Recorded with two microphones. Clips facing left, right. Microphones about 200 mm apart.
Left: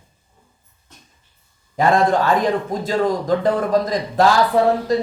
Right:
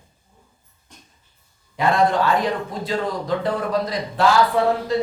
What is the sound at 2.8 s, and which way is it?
Speech, 45° left (ahead or behind).